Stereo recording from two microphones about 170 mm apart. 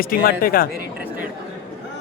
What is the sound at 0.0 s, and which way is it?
Speech, 60° left (ahead or behind).